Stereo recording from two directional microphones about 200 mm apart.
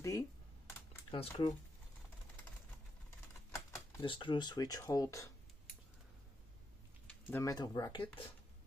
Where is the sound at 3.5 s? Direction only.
15° left (ahead or behind).